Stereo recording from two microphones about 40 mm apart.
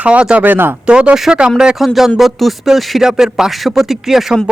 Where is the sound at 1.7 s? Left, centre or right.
Centre.